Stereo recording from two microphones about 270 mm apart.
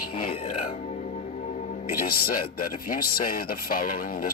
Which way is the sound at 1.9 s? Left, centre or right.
Left.